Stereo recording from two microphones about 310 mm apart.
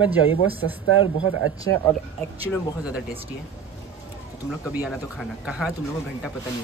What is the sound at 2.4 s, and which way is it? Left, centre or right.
Speech, centre.